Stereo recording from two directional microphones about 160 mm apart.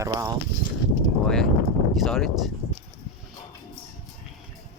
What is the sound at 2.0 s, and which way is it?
Speech, centre (ahead or behind).